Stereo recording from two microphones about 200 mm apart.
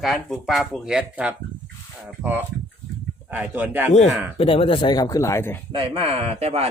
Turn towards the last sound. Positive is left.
turn(degrees=-30)  # may be behind; listen again after turning